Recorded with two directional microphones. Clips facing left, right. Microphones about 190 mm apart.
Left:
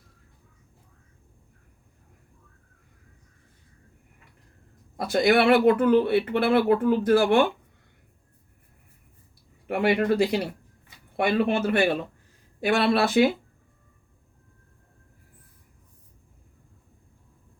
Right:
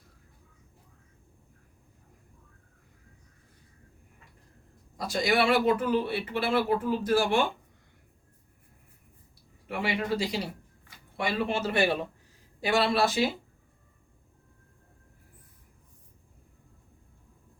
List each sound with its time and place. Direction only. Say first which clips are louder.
4.9 s speech: left 6 dB; 60° left (ahead or behind)
9.6 s speech: left 8 dB; 55° left (ahead or behind)